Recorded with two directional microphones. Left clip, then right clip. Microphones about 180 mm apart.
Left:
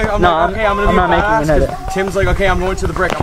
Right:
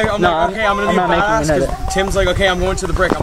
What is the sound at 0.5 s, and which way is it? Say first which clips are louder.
Speech: left 1 dB; 30° right (ahead or behind).